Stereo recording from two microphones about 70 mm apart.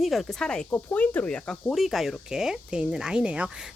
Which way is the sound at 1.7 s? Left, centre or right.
Centre.